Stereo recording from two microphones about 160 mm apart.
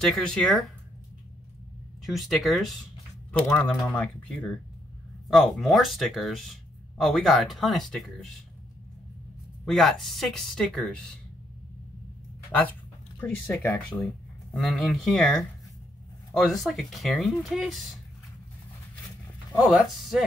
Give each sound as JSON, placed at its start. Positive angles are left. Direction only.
{"t": 0.0, "sound": "speech", "side_deg": 5}
{"t": 2.0, "sound": "speech", "side_deg": 0}
{"t": 9.7, "sound": "speech", "side_deg": 0}
{"t": 12.4, "sound": "speech", "side_deg": 10}
{"t": 16.6, "sound": "speech", "side_deg": 0}
{"t": 19.7, "sound": "speech", "side_deg": 0}